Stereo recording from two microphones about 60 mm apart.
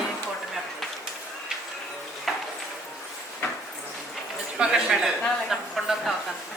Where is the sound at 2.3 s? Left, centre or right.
Centre.